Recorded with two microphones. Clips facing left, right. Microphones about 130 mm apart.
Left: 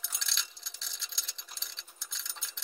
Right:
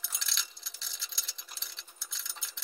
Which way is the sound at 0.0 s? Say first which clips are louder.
Even; centre (ahead or behind).